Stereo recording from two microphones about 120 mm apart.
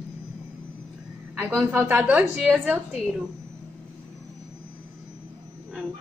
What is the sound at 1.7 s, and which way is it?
A woman's voice, 15° right (ahead or behind).